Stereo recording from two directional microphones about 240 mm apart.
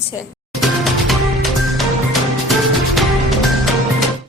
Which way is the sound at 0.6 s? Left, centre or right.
Centre.